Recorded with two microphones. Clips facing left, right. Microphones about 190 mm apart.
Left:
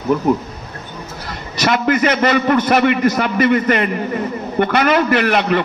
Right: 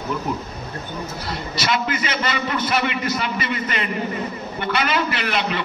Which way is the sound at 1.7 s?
55° left (ahead or behind).